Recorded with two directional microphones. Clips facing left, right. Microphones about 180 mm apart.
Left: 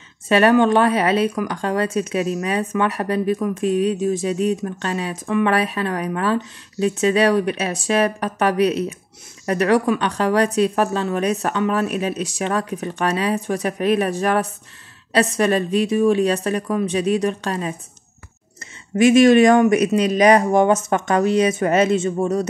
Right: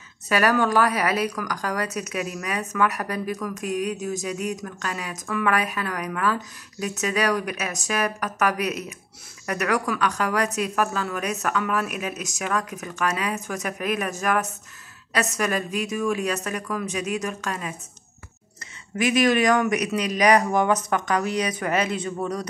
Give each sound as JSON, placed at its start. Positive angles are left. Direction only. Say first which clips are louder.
{"t": 0.3, "sound": "a woman's voice", "louder": "left 7 dB", "side_deg": 25}
{"t": 18.9, "sound": "speech", "louder": "left 9 dB", "side_deg": 25}